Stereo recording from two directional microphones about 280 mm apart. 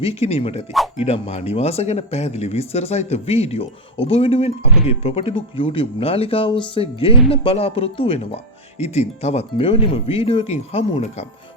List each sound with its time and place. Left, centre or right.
0.0 s speech: left